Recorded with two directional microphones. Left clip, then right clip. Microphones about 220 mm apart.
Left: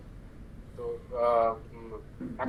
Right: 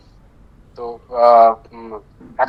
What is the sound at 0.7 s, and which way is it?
Speech, 45° right (ahead or behind).